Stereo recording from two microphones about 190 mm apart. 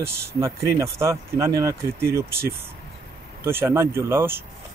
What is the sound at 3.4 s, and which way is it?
Speech, 15° right (ahead or behind).